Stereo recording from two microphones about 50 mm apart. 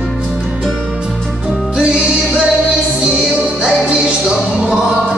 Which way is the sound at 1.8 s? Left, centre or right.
Right.